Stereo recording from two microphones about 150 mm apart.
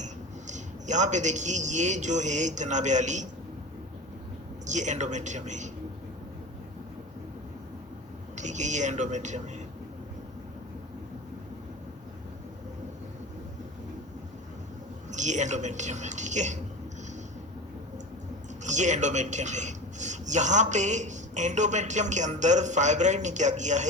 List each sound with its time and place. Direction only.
0.0 s a man's voice: 50° right (ahead or behind)
4.6 s a man's voice: 55° right (ahead or behind)
8.4 s a man's voice: 50° right (ahead or behind)
15.1 s a man's voice: 50° right (ahead or behind)
18.6 s a man's voice: 55° right (ahead or behind)